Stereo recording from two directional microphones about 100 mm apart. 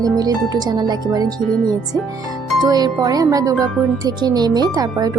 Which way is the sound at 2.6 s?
40° right (ahead or behind).